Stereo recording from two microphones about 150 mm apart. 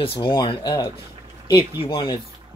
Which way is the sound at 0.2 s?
30° left (ahead or behind).